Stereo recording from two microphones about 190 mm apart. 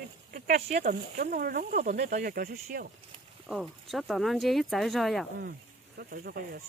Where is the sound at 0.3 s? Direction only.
50° right (ahead or behind).